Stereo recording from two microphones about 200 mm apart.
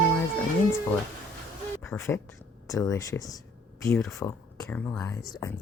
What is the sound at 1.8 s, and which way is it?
Speech, 10° left (ahead or behind).